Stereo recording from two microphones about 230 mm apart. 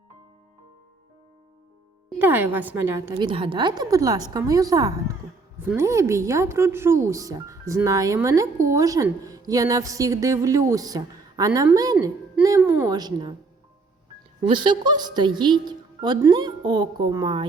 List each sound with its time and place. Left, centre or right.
2.1 s a woman's voice: centre
14.4 s a woman's voice: right